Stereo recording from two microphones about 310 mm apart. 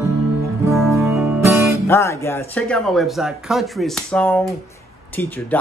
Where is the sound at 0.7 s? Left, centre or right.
Centre.